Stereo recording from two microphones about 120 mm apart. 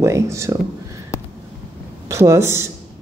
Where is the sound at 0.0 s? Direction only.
25° right (ahead or behind).